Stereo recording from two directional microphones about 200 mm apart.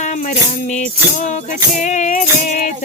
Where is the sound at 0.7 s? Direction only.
35° left (ahead or behind).